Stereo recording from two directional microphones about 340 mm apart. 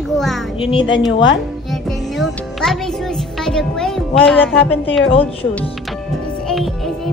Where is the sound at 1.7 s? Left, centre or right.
Centre.